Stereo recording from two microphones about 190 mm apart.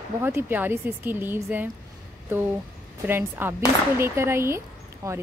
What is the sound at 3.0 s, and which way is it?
Speech, 10° right (ahead or behind).